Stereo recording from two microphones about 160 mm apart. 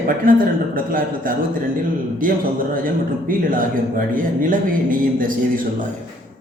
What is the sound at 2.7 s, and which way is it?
A man's voice, 60° right (ahead or behind).